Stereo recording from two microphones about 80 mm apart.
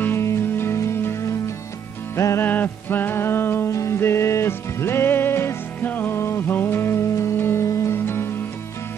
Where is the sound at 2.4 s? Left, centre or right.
Left.